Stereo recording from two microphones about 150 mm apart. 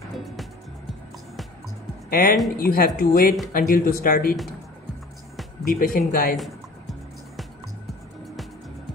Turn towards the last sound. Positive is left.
turn(degrees=0)  # may be behind; listen again after turning